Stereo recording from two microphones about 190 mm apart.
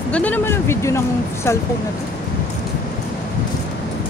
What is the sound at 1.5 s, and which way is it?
Speech, 15° left (ahead or behind).